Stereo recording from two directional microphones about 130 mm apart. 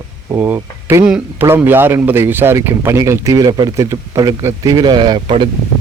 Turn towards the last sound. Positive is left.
turn(degrees=-40)  # may be behind; listen again after turning